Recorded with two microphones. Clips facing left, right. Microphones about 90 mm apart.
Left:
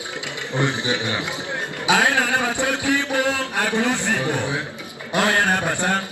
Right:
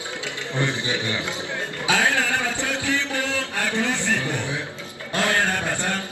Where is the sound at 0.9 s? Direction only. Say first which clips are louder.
Left 2 dB; 70° left (ahead or behind).